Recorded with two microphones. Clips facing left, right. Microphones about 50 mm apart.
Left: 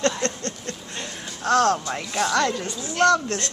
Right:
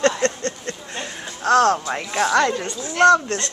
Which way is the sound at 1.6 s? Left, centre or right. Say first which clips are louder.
Right 3 dB; centre.